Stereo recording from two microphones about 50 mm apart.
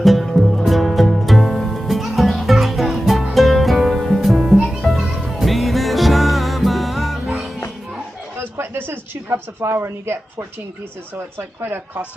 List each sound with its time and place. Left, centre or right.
0.0 s music: centre
8.4 s a sound: right
11.3 s speech: right